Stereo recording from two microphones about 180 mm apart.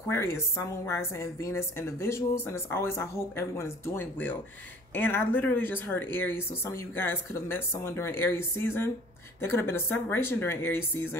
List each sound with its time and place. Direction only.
0.1 s speech: 15° left (ahead or behind)